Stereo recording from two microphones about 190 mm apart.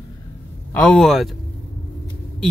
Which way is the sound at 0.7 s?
5° left (ahead or behind).